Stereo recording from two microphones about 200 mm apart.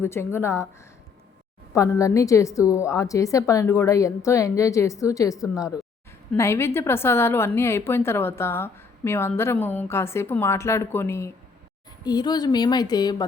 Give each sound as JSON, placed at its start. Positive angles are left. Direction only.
{"t": 0.0, "sound": "a woman's voice", "side_deg": 10}
{"t": 1.7, "sound": "a woman's voice", "side_deg": 15}